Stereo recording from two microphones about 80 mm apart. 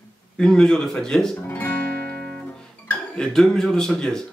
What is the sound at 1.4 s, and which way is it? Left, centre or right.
Guitar, left.